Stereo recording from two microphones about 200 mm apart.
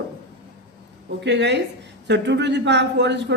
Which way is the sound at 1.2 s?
60° right (ahead or behind).